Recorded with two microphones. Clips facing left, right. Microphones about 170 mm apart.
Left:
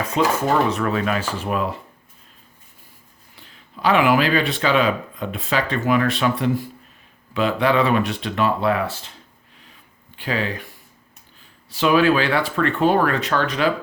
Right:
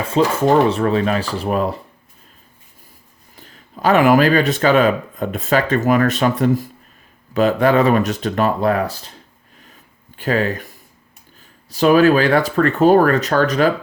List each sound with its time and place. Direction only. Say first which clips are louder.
0.0 s speech: right 4 dB; 30° right (ahead or behind)
3.3 s speech: right 4 dB; 45° right (ahead or behind)
9.6 s a sound: right 4 dB; 45° right (ahead or behind)
11.7 s speech: right 5 dB; 40° right (ahead or behind)